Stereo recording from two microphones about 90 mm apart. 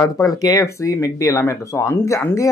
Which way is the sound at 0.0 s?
40° left (ahead or behind).